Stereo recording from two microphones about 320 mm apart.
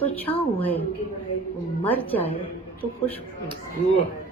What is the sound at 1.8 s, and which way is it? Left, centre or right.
Speech, centre.